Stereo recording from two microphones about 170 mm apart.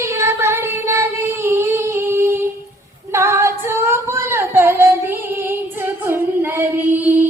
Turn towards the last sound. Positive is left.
turn(degrees=-10)  # may be behind; listen again after turning